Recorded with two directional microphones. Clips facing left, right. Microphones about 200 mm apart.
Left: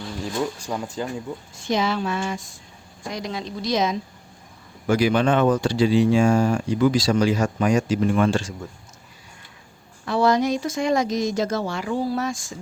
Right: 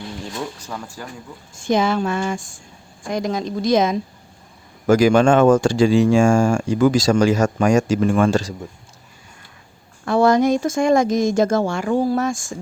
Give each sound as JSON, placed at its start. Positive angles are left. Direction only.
{"t": 0.7, "sound": "speech", "side_deg": 20}
{"t": 1.5, "sound": "speech", "side_deg": -50}
{"t": 10.1, "sound": "speech", "side_deg": -50}